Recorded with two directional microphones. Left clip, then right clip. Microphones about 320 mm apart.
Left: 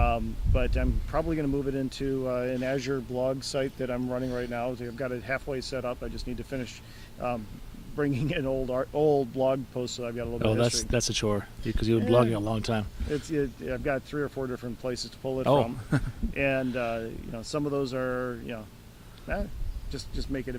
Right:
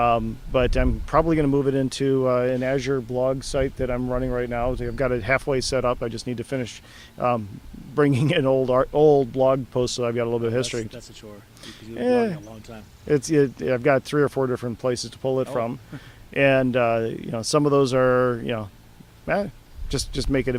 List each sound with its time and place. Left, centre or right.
0.0 s speech: right
10.9 s speech: left
13.1 s speech: right